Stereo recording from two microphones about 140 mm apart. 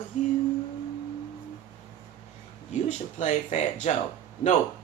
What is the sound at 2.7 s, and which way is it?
Speech, 55° left (ahead or behind).